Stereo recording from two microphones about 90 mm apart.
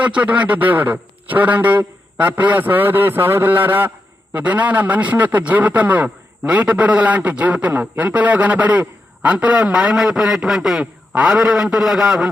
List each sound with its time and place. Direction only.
0.0 s a man's voice: 15° right (ahead or behind)